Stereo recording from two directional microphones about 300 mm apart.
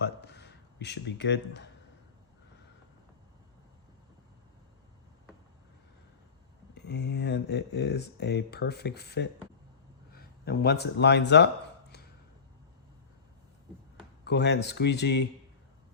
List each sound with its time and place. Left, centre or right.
0.0 s a sound: left
6.7 s speech: left
14.3 s speech: left